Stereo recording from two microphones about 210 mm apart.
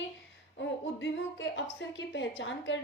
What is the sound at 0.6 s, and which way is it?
A woman's voice, 60° left (ahead or behind).